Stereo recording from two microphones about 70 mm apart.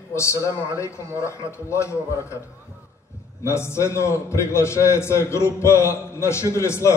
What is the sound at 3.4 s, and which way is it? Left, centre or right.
A man's voice, left.